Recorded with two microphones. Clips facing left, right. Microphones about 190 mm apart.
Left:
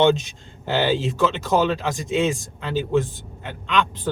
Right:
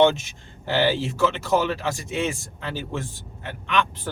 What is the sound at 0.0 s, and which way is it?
Speech, 20° left (ahead or behind).